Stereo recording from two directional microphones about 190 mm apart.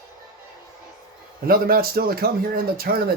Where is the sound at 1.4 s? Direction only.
50° right (ahead or behind).